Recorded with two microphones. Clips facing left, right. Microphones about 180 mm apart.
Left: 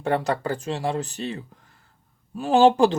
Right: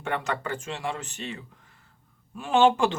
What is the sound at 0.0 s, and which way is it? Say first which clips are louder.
Speech: left 6 dB; 35° left (ahead or behind).